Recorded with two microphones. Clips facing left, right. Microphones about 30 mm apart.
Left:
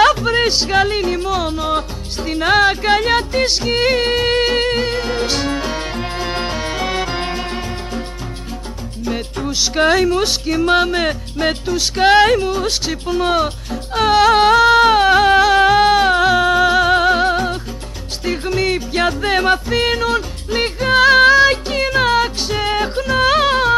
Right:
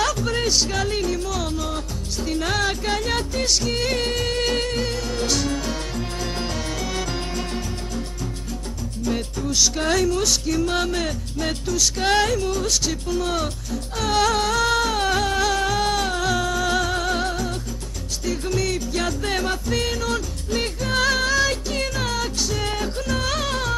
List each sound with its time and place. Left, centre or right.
0.0 s music: left
9.8 s speech: left
14.1 s music: left